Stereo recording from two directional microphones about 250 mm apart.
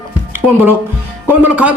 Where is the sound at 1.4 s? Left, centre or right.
Centre.